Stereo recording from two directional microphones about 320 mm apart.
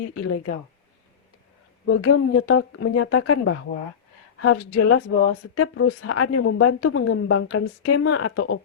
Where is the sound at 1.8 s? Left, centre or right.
Left.